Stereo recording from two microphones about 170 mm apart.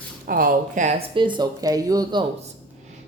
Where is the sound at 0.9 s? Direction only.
30° right (ahead or behind).